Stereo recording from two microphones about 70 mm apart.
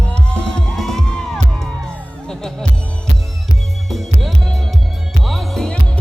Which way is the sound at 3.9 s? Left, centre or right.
Centre.